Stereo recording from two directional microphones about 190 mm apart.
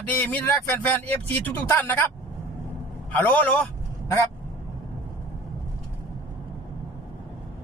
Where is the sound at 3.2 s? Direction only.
10° left (ahead or behind).